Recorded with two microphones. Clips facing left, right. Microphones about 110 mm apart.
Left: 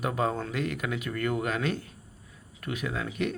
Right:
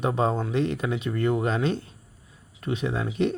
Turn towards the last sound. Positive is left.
turn(degrees=-30)  # may be behind; listen again after turning